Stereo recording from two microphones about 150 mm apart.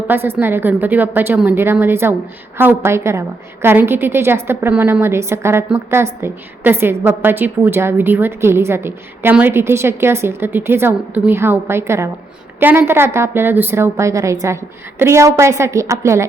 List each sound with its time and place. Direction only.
0.1 s a woman's voice: 15° right (ahead or behind)